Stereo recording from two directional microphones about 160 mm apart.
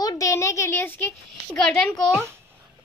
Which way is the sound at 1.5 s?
5° left (ahead or behind).